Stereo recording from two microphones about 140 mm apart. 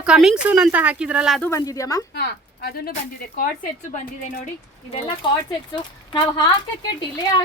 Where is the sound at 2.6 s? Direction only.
90° left.